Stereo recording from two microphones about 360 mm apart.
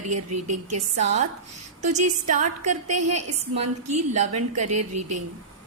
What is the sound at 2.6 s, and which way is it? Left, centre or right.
Speech, right.